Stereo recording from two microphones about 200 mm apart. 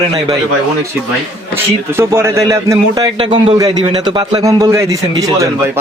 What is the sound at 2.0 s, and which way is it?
A man's voice, 15° right (ahead or behind).